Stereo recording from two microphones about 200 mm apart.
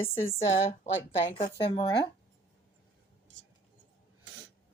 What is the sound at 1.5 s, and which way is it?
Speech, 25° left (ahead or behind).